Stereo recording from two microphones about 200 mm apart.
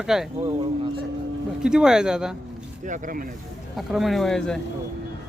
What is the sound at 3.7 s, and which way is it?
Speech, centre (ahead or behind).